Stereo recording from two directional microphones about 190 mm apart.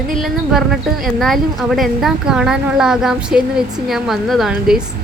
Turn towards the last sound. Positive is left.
turn(degrees=-5)  # may be behind; listen again after turning